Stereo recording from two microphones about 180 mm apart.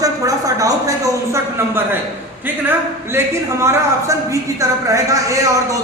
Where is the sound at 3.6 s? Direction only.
15° right (ahead or behind).